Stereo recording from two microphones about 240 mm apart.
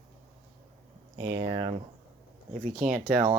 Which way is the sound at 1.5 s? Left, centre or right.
Right.